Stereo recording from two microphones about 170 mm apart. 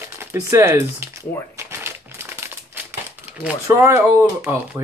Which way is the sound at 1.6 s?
15° right (ahead or behind).